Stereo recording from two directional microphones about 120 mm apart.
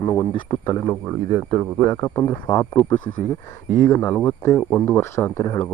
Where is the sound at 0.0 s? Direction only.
25° left (ahead or behind).